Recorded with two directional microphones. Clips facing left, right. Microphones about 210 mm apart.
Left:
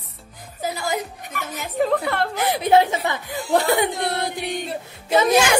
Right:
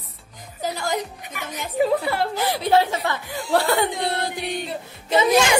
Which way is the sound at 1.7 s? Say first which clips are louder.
Even; 5° right (ahead or behind).